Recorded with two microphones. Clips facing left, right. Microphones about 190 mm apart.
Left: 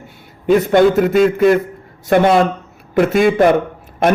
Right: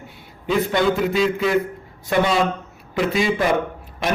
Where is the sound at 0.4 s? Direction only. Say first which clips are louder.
Left 8 dB; 50° left (ahead or behind).